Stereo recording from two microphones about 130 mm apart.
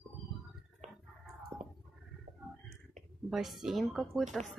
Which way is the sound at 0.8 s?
60° right (ahead or behind).